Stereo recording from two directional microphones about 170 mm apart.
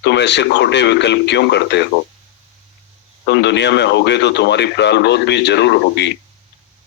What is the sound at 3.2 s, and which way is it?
A man's voice, 90° left.